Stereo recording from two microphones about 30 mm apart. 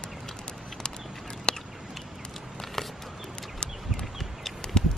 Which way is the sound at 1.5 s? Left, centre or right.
Left.